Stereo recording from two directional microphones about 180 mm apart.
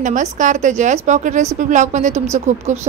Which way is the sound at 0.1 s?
45° right (ahead or behind).